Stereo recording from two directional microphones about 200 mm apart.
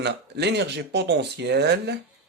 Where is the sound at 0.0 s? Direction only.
55° right (ahead or behind).